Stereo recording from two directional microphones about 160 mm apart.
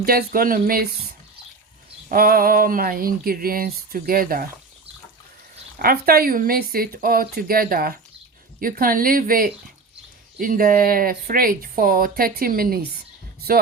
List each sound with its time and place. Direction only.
0.0 s speech: 70° right (ahead or behind)
5.8 s speech: 70° right (ahead or behind)